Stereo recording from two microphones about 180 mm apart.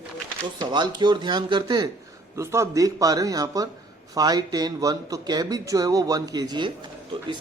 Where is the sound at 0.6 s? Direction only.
25° right (ahead or behind).